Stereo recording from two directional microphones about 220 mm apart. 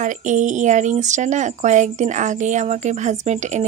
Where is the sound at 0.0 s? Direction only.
35° right (ahead or behind).